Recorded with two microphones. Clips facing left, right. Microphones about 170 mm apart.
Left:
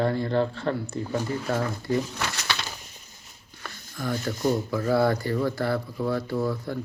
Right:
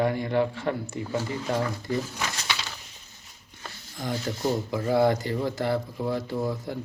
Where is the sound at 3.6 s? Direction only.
20° right (ahead or behind).